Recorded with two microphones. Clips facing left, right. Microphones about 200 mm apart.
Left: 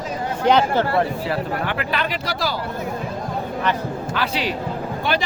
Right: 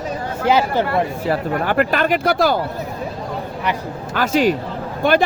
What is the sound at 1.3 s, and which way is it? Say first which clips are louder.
Speech: right 4 dB; 45° right (ahead or behind).